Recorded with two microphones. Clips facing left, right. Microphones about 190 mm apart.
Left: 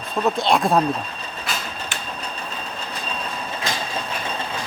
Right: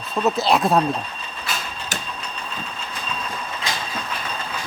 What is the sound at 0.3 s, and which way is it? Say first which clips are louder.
Speech: right 1 dB; 5° right (ahead or behind).